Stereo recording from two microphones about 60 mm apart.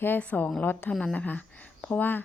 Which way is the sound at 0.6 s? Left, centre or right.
Left.